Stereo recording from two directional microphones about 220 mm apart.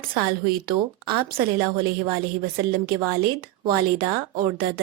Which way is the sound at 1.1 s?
40° right (ahead or behind).